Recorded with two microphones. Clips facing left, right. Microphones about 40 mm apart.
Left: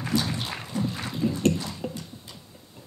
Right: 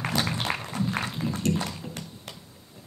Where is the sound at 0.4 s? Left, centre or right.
Right.